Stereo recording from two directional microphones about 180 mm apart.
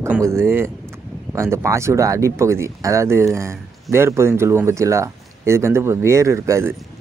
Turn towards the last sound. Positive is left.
turn(degrees=-15)  # may be behind; listen again after turning